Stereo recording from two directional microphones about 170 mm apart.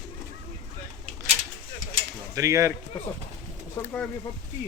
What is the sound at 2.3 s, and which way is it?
Speech, 20° right (ahead or behind).